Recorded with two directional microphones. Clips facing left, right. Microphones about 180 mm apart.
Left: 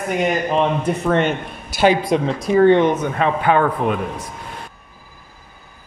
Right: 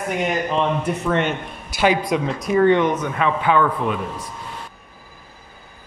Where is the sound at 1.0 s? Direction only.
45° left (ahead or behind).